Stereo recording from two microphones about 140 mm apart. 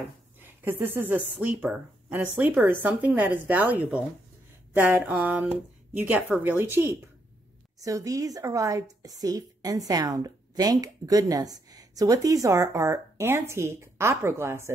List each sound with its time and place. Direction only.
0.4 s a woman's voice: 15° right (ahead or behind)